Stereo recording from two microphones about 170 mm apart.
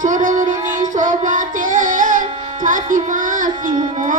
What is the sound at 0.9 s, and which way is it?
Music, 50° right (ahead or behind).